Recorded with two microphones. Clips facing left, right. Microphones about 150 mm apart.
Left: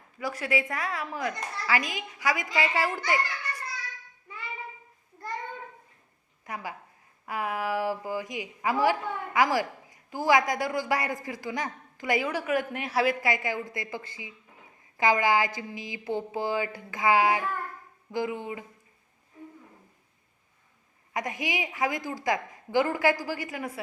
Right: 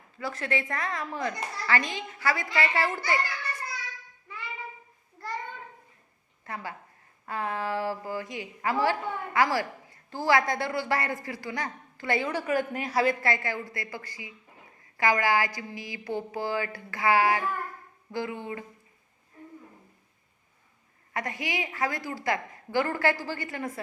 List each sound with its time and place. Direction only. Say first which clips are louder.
0.2 s a woman's voice: left 2 dB; 10° left (ahead or behind)
6.4 s a woman's voice: left 1 dB; 15° left (ahead or behind)
21.1 s a woman's voice: left 1 dB; 15° left (ahead or behind)